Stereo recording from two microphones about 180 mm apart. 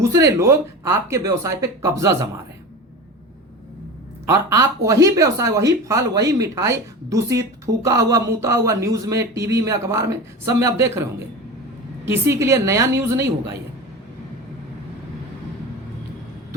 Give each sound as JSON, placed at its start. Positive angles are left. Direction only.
{"t": 0.1, "sound": "speech", "side_deg": -15}
{"t": 4.3, "sound": "speech", "side_deg": -15}
{"t": 12.0, "sound": "speech", "side_deg": -15}